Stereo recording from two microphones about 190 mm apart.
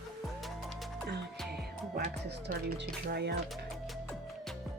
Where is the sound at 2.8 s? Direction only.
60° right (ahead or behind).